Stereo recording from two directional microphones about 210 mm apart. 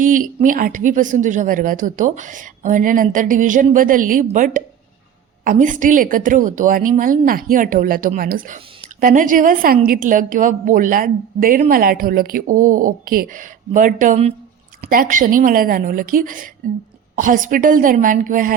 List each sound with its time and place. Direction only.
0.0 s speech: 40° right (ahead or behind)